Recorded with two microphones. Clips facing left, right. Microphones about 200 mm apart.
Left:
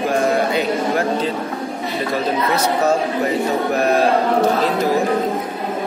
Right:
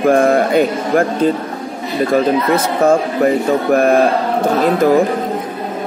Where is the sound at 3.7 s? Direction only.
50° right (ahead or behind).